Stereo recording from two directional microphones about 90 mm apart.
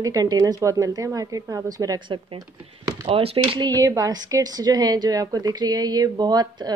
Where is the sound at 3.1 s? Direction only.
90° right.